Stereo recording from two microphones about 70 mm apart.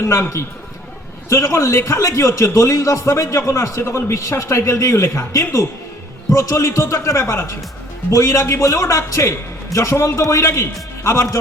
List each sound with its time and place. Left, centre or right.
0.0 s a man's voice: left